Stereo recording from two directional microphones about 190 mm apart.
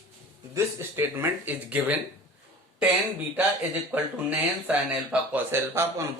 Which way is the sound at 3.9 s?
10° right (ahead or behind).